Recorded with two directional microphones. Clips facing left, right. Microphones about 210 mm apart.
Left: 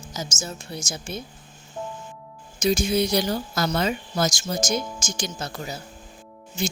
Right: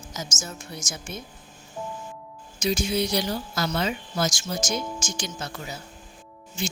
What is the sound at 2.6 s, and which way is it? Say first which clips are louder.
Speech: left 3 dB; 45° left (ahead or behind).